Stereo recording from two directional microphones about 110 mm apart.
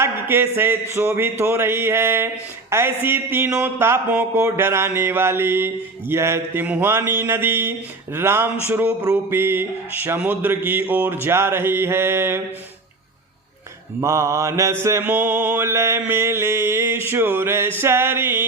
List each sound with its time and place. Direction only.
0.0 s speech: 20° right (ahead or behind)
14.0 s speech: 25° right (ahead or behind)